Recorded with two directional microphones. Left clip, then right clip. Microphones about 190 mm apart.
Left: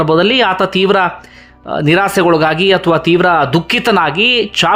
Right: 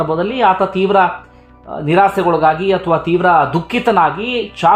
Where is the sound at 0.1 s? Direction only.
25° left (ahead or behind).